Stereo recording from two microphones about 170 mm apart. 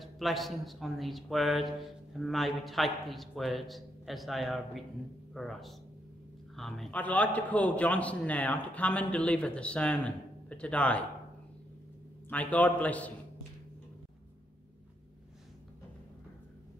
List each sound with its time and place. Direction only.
0.0 s a man's voice: centre (ahead or behind)
12.3 s a man's voice: 10° left (ahead or behind)